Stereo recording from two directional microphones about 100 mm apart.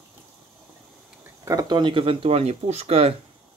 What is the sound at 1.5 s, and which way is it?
Speech, 40° right (ahead or behind).